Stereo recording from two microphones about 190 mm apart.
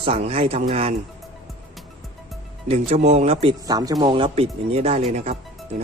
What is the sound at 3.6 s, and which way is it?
Speech, 20° right (ahead or behind).